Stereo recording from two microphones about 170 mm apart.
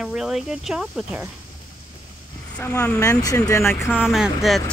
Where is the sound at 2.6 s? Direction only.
20° left (ahead or behind).